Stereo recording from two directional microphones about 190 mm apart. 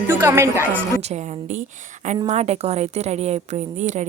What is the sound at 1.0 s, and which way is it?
A woman's voice, 35° right (ahead or behind).